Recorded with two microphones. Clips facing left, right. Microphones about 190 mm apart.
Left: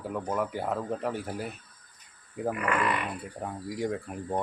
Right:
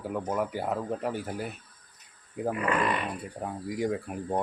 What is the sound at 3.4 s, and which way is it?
Speech, 5° right (ahead or behind).